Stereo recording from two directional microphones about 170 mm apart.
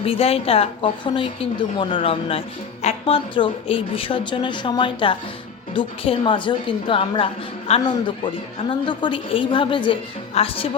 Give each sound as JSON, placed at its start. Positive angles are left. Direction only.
{"t": 0.0, "sound": "a woman's voice", "side_deg": 35}